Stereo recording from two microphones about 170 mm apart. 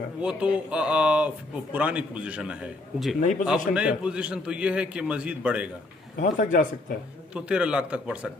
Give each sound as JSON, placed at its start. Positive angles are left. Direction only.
{"t": 0.2, "sound": "speech", "side_deg": -5}
{"t": 3.2, "sound": "a man's voice", "side_deg": 50}
{"t": 3.4, "sound": "speech", "side_deg": -5}
{"t": 6.1, "sound": "a man's voice", "side_deg": 50}
{"t": 7.3, "sound": "speech", "side_deg": -5}